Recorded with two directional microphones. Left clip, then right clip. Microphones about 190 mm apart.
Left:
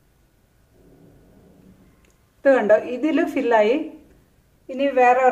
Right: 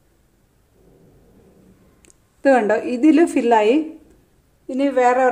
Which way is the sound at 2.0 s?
40° right (ahead or behind).